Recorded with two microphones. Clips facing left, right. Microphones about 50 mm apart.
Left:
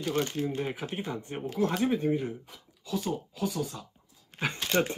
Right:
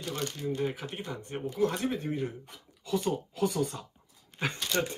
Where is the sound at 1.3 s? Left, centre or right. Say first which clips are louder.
Even; centre.